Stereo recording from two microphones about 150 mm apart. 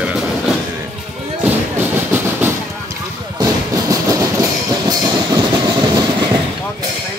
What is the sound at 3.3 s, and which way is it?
Train, 20° right (ahead or behind).